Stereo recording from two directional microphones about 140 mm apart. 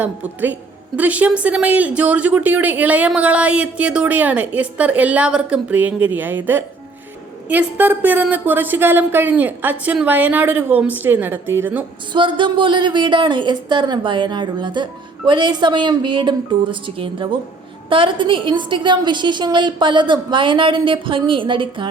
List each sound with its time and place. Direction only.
0.0 s speech: 10° right (ahead or behind)
12.1 s a woman's voice: 35° right (ahead or behind)